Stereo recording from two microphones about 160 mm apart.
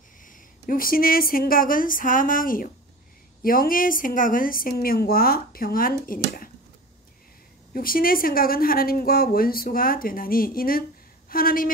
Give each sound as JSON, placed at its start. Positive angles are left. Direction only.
{"t": 0.7, "sound": "speech", "side_deg": 65}
{"t": 7.7, "sound": "a woman's voice", "side_deg": 65}